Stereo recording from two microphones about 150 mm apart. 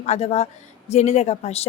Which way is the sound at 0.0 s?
45° left (ahead or behind).